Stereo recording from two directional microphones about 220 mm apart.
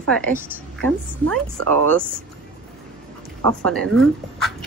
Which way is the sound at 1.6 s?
90° right.